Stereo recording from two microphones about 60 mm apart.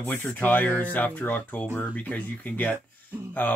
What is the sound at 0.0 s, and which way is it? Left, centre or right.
Speech, left.